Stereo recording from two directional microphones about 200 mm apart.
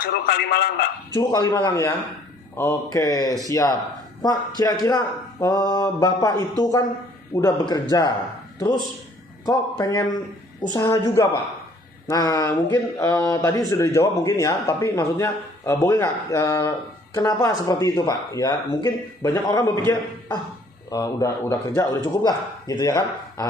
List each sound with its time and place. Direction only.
0.0 s a man's voice: 50° left (ahead or behind)
1.1 s speech: 15° left (ahead or behind)
9.5 s speech: 20° left (ahead or behind)